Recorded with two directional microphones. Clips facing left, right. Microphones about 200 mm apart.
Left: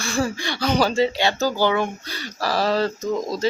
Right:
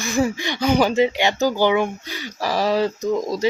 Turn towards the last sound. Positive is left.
turn(degrees=-15)  # may be behind; listen again after turning